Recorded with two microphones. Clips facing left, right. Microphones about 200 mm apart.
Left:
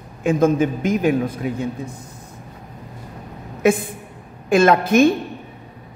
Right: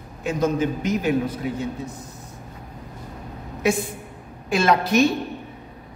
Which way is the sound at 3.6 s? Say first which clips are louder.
Left 5 dB; 55° left (ahead or behind).